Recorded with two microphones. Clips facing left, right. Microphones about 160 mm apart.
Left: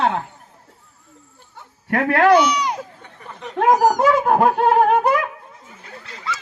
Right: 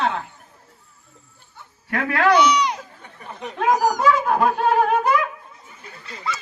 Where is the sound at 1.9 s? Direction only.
55° left (ahead or behind).